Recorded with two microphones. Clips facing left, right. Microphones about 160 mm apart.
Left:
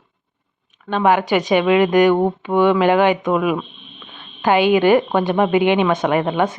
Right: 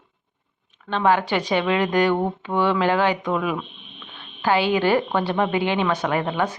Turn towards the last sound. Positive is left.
turn(degrees=20)  # may be behind; listen again after turning